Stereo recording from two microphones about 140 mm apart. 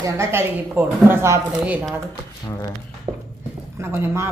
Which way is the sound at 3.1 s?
35° right (ahead or behind).